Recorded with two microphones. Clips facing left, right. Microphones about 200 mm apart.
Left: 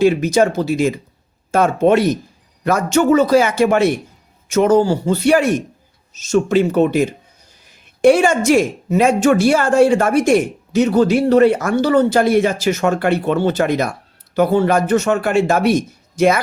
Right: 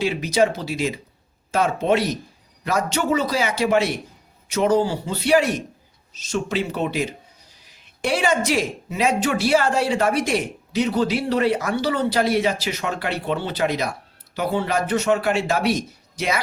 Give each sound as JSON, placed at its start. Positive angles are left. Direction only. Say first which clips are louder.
{"t": 0.0, "sound": "speech", "louder": "left 6 dB", "side_deg": 50}
{"t": 7.6, "sound": "a sound", "louder": "left 15 dB", "side_deg": 50}
{"t": 8.4, "sound": "speech", "louder": "left 9 dB", "side_deg": 50}